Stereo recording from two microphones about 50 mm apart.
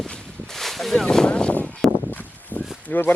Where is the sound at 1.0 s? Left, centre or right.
Centre.